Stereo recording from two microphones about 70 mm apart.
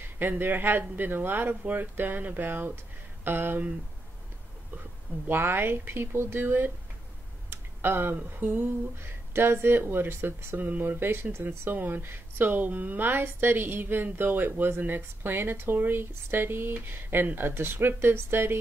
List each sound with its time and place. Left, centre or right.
0.2 s speech: right
5.3 s speech: right